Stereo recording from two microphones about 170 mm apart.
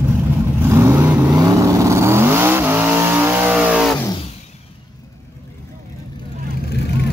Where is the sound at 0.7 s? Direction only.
15° right (ahead or behind).